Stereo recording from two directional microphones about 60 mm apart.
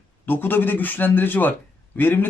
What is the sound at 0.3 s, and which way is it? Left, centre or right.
A man's voice, left.